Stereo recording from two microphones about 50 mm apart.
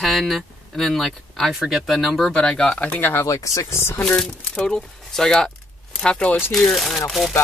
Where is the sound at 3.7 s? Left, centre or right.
Left.